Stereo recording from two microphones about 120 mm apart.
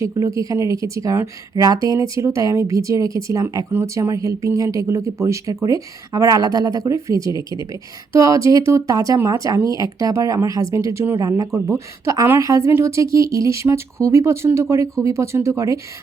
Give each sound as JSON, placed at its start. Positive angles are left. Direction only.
{"t": 0.1, "sound": "a woman's voice", "side_deg": -30}